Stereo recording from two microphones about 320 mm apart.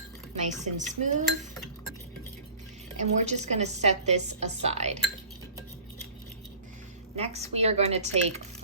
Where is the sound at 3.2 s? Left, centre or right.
Right.